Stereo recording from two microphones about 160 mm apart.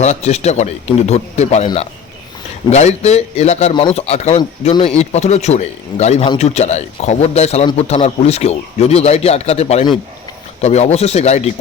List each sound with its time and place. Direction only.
0.0 s a man's voice: 45° left (ahead or behind)